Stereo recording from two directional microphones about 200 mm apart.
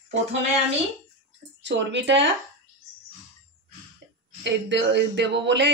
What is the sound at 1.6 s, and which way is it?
Speech, 60° right (ahead or behind).